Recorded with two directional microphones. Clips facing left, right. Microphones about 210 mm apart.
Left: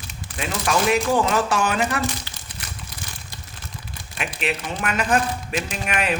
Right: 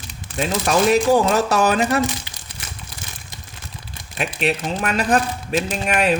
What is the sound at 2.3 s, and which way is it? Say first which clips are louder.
Crumpling: even; 15° right (ahead or behind).